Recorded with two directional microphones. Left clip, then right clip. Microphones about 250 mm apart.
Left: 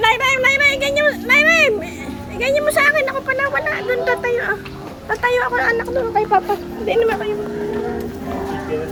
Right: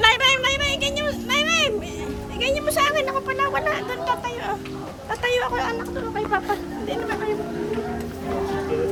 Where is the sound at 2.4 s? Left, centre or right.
Centre.